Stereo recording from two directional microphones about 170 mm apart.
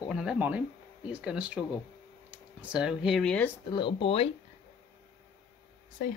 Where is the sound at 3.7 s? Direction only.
30° left (ahead or behind).